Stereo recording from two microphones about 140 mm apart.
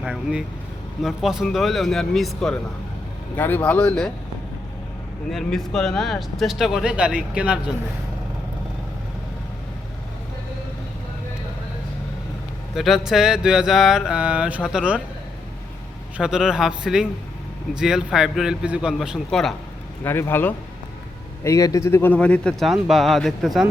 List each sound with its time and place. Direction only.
0.0 s speech: 5° right (ahead or behind)
5.3 s speech: centre (ahead or behind)
12.7 s speech: centre (ahead or behind)
16.1 s speech: 5° right (ahead or behind)
20.1 s speech: 15° left (ahead or behind)